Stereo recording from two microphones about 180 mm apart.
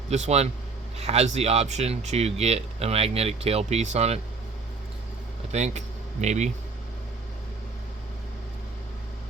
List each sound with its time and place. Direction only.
0.1 s speech: 35° right (ahead or behind)
5.5 s speech: 40° right (ahead or behind)